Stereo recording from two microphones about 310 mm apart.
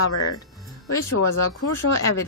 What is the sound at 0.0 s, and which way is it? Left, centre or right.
A woman's voice, left.